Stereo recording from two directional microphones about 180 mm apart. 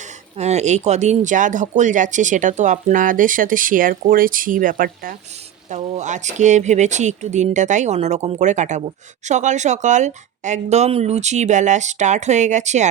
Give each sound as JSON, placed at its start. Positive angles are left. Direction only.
{"t": 0.3, "sound": "speech", "side_deg": -40}